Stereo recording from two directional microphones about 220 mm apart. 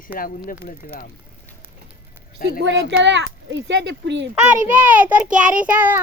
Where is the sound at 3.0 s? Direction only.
55° right (ahead or behind).